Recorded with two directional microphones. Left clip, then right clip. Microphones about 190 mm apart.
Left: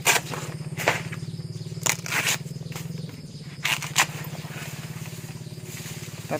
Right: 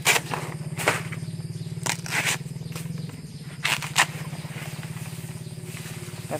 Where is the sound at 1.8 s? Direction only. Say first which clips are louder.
Left 1 dB; 5° left (ahead or behind).